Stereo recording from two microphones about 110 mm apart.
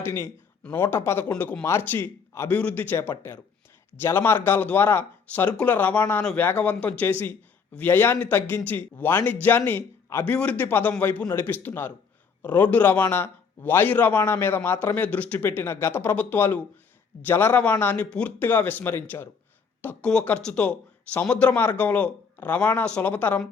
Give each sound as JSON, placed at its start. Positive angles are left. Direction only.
{"t": 0.0, "sound": "a man's voice", "side_deg": 25}